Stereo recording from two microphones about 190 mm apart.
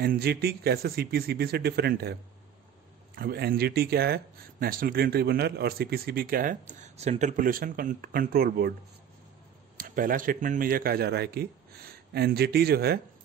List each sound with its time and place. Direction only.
0.0 s a man's voice: 55° right (ahead or behind)
3.2 s speech: 55° right (ahead or behind)
9.8 s speech: 45° right (ahead or behind)